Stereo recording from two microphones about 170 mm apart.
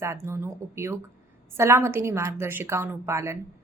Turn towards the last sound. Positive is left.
turn(degrees=-15)  # may be behind; listen again after turning